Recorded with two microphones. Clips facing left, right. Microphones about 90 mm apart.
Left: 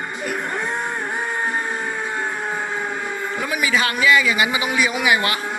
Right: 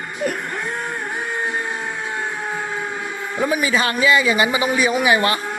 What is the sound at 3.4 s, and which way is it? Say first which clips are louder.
A man's voice: right 3 dB; 30° right (ahead or behind).